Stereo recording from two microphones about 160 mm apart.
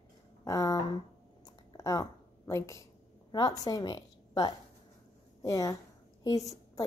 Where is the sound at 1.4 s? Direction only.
25° left (ahead or behind).